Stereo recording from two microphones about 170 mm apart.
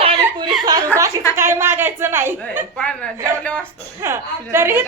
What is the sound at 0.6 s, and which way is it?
Chuckle, 20° right (ahead or behind).